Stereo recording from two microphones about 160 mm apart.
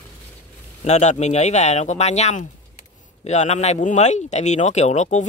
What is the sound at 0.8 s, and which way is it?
Speech, 45° left (ahead or behind).